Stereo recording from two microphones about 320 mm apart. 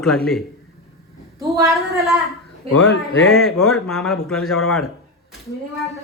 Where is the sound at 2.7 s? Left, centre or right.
Left.